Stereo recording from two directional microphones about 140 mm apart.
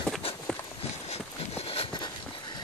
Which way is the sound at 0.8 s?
50° left (ahead or behind).